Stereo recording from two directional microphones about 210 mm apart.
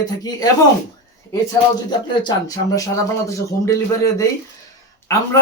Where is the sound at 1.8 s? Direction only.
20° left (ahead or behind).